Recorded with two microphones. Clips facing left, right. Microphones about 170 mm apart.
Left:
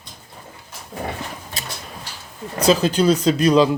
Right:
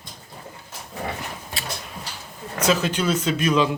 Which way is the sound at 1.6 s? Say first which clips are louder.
Right 2 dB; 40° left (ahead or behind).